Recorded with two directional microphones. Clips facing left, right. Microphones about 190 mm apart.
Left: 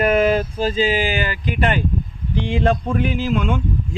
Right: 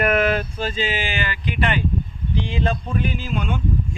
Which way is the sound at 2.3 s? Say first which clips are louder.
Left 5 dB; 60° left (ahead or behind).